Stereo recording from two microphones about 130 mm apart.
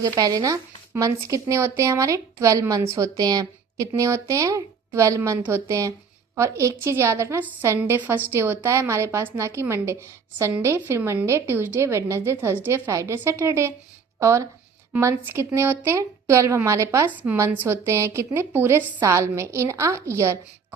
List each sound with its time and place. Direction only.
0.0 s a woman's voice: 30° right (ahead or behind)